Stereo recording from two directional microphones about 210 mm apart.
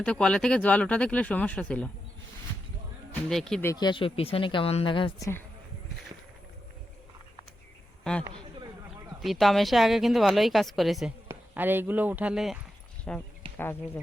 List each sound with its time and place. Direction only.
0.0 s a woman's voice: 5° left (ahead or behind)
3.1 s speech: 5° left (ahead or behind)
3.7 s speech: 20° left (ahead or behind)
9.2 s a woman's voice: centre (ahead or behind)